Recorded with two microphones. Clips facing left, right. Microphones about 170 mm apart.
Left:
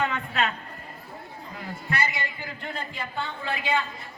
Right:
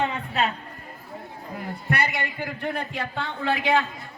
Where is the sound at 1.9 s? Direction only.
65° right (ahead or behind).